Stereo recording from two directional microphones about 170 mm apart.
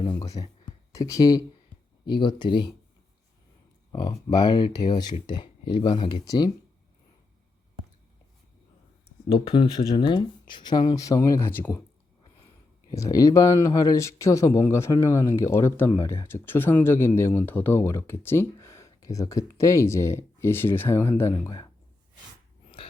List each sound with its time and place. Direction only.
0.0 s a sound: 25° left (ahead or behind)
0.9 s speech: 20° left (ahead or behind)
3.9 s speech: 25° left (ahead or behind)
9.3 s speech: 30° left (ahead or behind); by 11.8 s 10° left (ahead or behind)
12.9 s speech: 20° left (ahead or behind)